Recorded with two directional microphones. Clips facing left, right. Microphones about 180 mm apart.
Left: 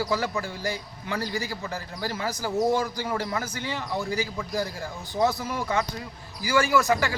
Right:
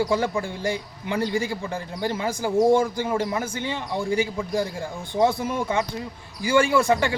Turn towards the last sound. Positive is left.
turn(degrees=-30)  # may be behind; listen again after turning